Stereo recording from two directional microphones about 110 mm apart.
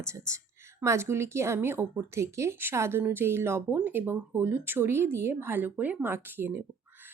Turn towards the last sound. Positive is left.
turn(degrees=-20)  # may be behind; listen again after turning